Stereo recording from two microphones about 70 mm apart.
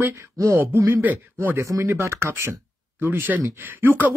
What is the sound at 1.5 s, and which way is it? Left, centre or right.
Speech, right.